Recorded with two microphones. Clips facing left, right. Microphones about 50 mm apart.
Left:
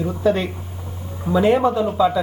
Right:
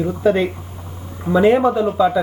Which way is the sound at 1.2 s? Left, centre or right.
Centre.